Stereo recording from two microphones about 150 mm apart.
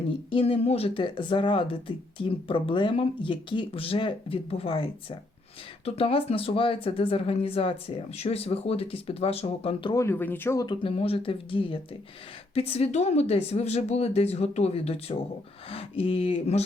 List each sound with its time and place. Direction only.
0.3 s speech: 40° left (ahead or behind)
9.9 s speech: 20° left (ahead or behind)
10.7 s a woman's voice: 40° left (ahead or behind)